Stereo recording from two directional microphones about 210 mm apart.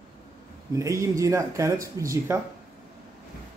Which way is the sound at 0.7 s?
15° right (ahead or behind).